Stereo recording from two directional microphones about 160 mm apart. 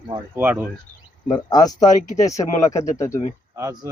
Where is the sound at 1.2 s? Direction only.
25° left (ahead or behind).